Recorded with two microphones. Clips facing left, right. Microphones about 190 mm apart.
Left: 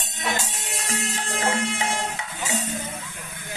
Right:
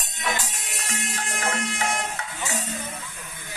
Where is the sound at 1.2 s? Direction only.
30° left (ahead or behind).